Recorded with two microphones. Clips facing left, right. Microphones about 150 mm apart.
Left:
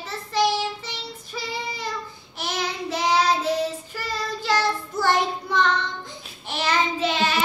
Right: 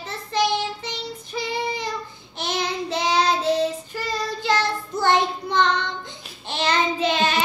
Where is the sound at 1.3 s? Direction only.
20° right (ahead or behind).